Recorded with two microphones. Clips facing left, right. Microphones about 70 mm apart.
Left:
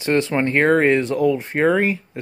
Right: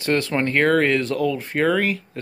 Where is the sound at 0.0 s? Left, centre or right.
Left.